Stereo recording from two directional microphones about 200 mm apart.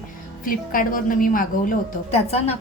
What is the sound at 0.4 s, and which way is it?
A woman's voice, 45° left (ahead or behind).